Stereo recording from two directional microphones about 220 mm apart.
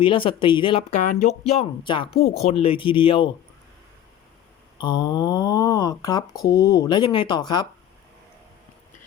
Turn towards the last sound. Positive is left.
turn(degrees=20)  # may be behind; listen again after turning